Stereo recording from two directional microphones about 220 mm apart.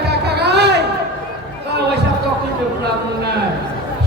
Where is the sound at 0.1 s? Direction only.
50° right (ahead or behind).